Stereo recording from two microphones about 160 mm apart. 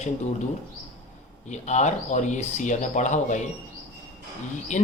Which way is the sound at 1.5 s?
45° left (ahead or behind).